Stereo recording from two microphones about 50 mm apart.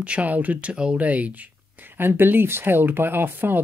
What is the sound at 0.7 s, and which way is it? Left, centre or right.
Speech, centre.